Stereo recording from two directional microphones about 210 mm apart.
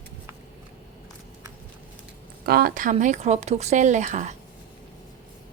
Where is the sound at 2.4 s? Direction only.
45° right (ahead or behind).